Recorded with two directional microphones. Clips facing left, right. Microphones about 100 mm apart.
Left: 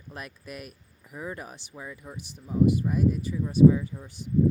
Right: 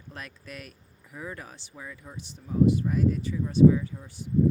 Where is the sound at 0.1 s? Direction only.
15° left (ahead or behind).